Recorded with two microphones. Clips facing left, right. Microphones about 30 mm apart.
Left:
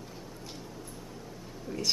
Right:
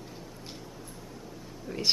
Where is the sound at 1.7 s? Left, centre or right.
Right.